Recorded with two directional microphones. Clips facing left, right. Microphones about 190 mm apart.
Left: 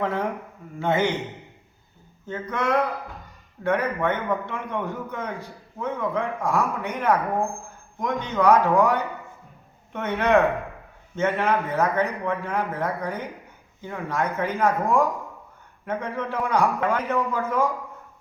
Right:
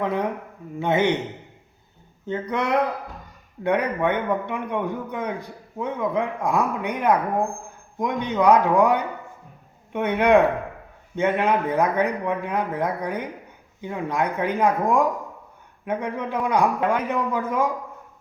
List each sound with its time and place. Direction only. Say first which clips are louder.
0.0 s a man's voice: right 1 dB; 15° right (ahead or behind)
2.2 s a man's voice: right 1 dB; 20° right (ahead or behind)